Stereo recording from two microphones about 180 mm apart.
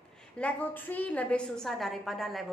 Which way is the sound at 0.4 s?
10° left (ahead or behind).